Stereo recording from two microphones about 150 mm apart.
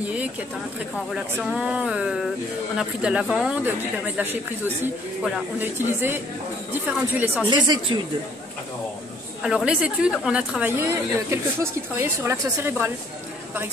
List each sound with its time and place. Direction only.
0.0 s speech: 10° right (ahead or behind)
5.6 s a woman's voice: 15° right (ahead or behind)
7.4 s speech: 30° right (ahead or behind)
9.4 s a woman's voice: 5° right (ahead or behind)